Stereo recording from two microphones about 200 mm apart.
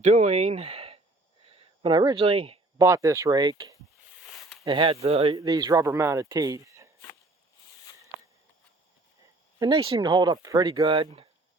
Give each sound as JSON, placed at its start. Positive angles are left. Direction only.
{"t": 0.0, "sound": "speech", "side_deg": -35}
{"t": 2.7, "sound": "speech", "side_deg": -15}
{"t": 4.2, "sound": "a sound", "side_deg": 0}
{"t": 4.6, "sound": "speech", "side_deg": -25}
{"t": 5.4, "sound": "speech", "side_deg": -20}
{"t": 9.6, "sound": "speech", "side_deg": -25}